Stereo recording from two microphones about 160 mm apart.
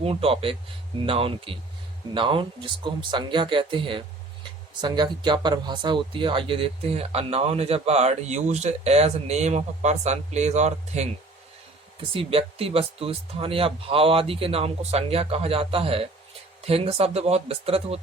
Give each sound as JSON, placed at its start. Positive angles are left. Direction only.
{"t": 0.0, "sound": "speech", "side_deg": -40}
{"t": 12.1, "sound": "speech", "side_deg": -35}